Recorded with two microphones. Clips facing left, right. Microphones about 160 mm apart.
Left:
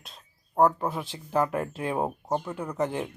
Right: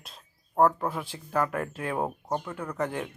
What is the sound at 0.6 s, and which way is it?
Speech, 20° left (ahead or behind).